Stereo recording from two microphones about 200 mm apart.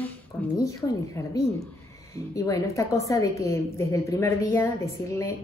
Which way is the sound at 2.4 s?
15° left (ahead or behind).